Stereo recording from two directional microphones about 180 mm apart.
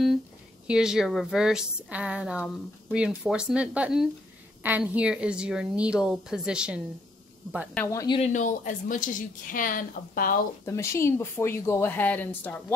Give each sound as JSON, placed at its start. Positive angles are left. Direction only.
{"t": 0.7, "sound": "a woman's voice", "side_deg": -5}
{"t": 7.7, "sound": "speech", "side_deg": 15}
{"t": 8.2, "sound": "speech", "side_deg": 45}
{"t": 10.6, "sound": "speech", "side_deg": 15}